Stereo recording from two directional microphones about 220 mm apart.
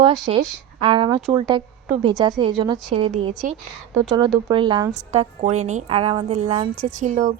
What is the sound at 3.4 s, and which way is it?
Speech, 40° right (ahead or behind).